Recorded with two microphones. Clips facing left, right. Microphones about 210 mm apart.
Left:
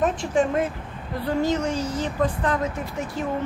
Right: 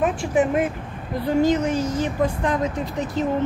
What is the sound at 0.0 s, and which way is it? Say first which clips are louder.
A woman's voice: right 2 dB; 15° right (ahead or behind).